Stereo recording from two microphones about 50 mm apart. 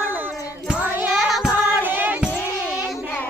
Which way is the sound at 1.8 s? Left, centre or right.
Right.